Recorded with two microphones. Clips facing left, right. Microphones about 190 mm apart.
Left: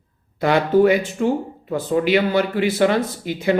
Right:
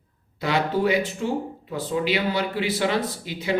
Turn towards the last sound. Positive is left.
turn(degrees=50)  # may be behind; listen again after turning